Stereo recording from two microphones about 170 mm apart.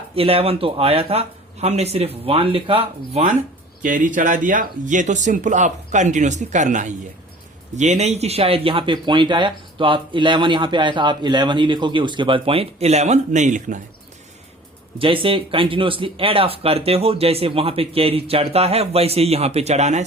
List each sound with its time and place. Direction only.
0.2 s speech: 35° right (ahead or behind)
3.8 s speech: 50° right (ahead or behind)
14.9 s speech: 30° right (ahead or behind)